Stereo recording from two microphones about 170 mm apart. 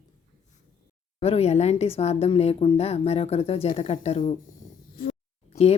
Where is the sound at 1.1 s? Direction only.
35° left (ahead or behind).